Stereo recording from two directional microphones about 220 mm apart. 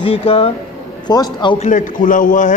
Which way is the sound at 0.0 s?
25° left (ahead or behind).